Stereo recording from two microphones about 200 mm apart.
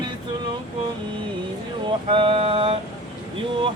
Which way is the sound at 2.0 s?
25° right (ahead or behind).